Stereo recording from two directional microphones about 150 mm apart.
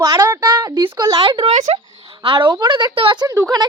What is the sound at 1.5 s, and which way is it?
Speech, 50° right (ahead or behind).